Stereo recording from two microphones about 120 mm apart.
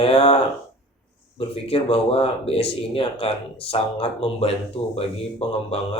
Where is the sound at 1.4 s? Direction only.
55° left (ahead or behind).